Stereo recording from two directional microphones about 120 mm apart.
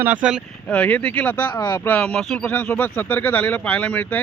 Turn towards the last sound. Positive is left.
turn(degrees=10)  # may be behind; listen again after turning